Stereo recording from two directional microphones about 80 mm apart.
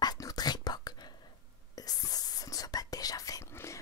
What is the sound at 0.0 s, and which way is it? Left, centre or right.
Whispering, left.